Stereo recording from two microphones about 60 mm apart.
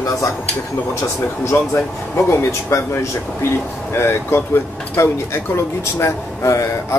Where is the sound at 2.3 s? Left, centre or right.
Left.